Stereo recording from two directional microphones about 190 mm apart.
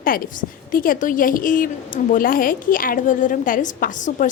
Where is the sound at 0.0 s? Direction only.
45° left (ahead or behind).